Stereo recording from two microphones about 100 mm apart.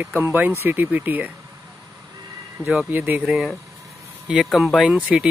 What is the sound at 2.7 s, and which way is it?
Speech, 15° right (ahead or behind).